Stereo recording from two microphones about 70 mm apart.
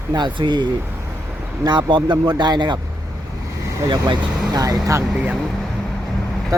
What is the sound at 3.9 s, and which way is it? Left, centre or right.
Speech, right.